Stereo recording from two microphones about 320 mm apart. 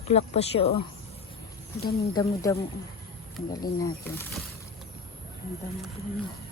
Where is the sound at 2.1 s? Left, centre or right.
Centre.